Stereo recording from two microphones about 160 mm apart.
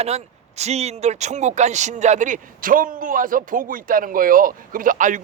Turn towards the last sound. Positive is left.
turn(degrees=-55)  # may be behind; listen again after turning